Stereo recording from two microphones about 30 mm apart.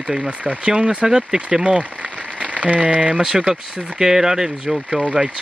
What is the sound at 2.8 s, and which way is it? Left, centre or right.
Speech, right.